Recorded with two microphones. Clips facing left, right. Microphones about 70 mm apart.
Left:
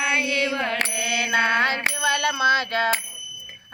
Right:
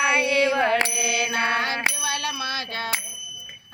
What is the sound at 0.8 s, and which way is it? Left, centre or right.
Mantra, left.